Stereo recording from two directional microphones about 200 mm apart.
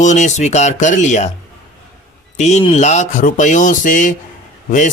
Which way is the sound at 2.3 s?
35° left (ahead or behind).